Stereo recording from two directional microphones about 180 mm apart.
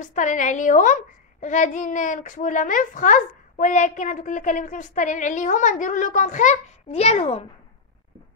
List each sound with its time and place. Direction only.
0.0 s a child's voice: 45° left (ahead or behind)